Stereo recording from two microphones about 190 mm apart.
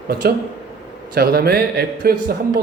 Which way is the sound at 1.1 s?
55° right (ahead or behind).